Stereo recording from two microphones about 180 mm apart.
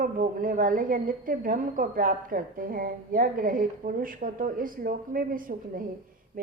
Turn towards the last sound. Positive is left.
turn(degrees=-50)  # may be behind; listen again after turning